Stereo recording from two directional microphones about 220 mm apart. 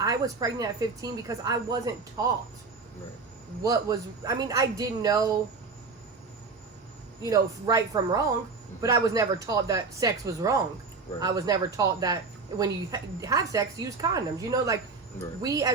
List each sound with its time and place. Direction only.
0.0 s speech: 15° right (ahead or behind)
3.6 s speech: 15° right (ahead or behind)
7.3 s speech: 15° right (ahead or behind)